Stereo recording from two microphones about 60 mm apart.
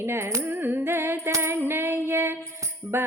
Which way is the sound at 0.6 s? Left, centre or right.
Right.